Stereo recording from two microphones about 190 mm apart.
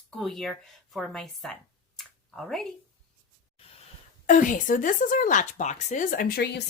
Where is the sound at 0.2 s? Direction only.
Centre (ahead or behind).